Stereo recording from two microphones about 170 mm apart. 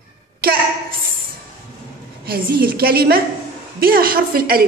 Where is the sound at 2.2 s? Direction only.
60° right (ahead or behind).